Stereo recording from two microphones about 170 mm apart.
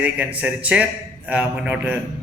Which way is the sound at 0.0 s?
10° right (ahead or behind).